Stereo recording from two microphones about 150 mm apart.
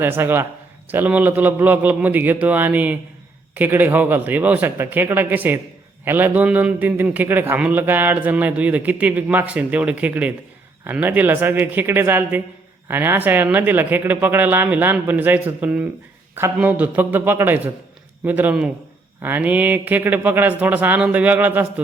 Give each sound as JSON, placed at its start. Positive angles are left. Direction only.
{"t": 0.0, "sound": "a man's voice", "side_deg": -15}